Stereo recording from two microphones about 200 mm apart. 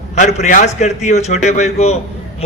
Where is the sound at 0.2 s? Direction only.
35° left (ahead or behind).